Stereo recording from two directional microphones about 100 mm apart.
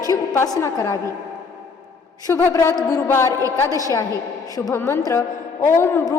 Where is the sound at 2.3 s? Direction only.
30° left (ahead or behind).